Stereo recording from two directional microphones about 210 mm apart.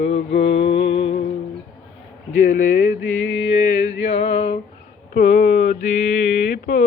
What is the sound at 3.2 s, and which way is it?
Mantra, 65° left (ahead or behind).